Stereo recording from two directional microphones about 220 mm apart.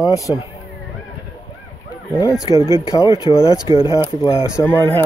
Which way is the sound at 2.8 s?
20° left (ahead or behind).